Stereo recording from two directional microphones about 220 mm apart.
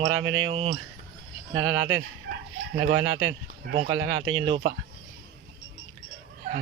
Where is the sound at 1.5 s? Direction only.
65° right (ahead or behind).